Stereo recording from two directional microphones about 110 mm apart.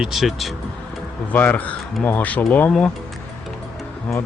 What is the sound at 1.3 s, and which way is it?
Speech, 15° left (ahead or behind).